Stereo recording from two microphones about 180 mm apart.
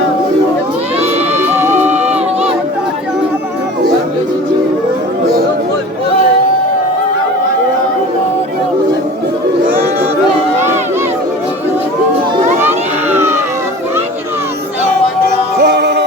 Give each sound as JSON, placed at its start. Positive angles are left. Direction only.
{"t": 1.4, "sound": "music", "side_deg": -10}
{"t": 12.5, "sound": "a sound", "side_deg": -10}
{"t": 15.6, "sound": "music", "side_deg": -65}